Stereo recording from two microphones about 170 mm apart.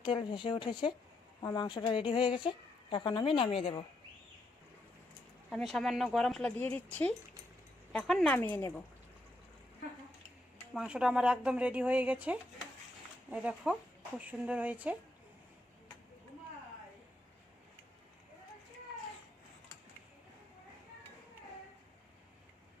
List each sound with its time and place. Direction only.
0.0 s speech: 30° left (ahead or behind)
5.5 s speech: centre (ahead or behind)
8.4 s speech: 15° left (ahead or behind)
10.8 s speech: 5° right (ahead or behind)